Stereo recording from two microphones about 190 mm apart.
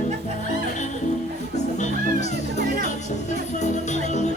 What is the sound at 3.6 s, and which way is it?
Music, 40° left (ahead or behind).